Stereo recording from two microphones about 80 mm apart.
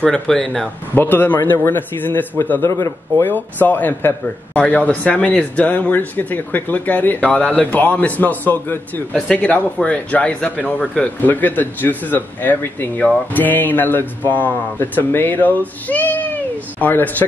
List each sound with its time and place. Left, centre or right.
0.0 s speech: centre
0.9 s speech: left
2.6 s speech: left
3.3 s speech: left